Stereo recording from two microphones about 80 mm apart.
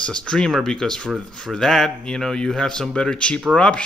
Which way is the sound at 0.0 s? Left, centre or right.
Centre.